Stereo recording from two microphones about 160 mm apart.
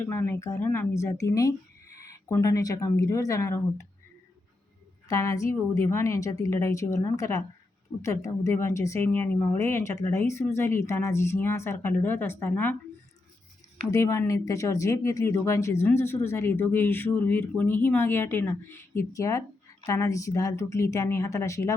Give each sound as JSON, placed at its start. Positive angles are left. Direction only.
{"t": 0.0, "sound": "a woman's voice", "side_deg": 15}
{"t": 5.0, "sound": "a woman's voice", "side_deg": 20}
{"t": 13.9, "sound": "speech", "side_deg": 20}